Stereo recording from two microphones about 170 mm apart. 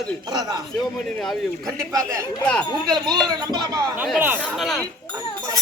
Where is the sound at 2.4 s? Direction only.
5° left (ahead or behind).